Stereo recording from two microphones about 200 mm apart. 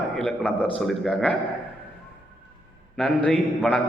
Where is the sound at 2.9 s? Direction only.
5° left (ahead or behind).